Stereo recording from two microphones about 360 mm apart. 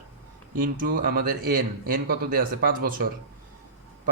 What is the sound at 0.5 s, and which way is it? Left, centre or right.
Speech, right.